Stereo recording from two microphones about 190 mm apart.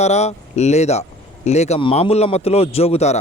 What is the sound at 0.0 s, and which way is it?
Speech, 35° left (ahead or behind).